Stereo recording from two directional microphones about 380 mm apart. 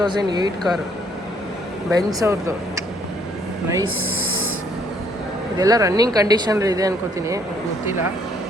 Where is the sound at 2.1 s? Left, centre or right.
Centre.